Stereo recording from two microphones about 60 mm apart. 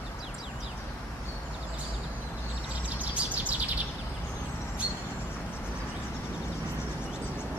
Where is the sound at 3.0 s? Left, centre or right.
Right.